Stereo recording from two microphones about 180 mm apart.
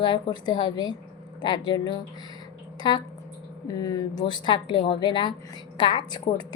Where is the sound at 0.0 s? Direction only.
25° left (ahead or behind).